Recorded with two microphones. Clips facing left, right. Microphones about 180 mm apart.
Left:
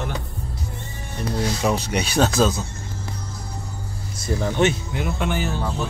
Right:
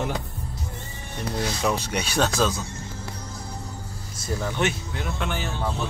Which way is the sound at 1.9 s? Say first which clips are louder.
Left 4 dB; 10° left (ahead or behind).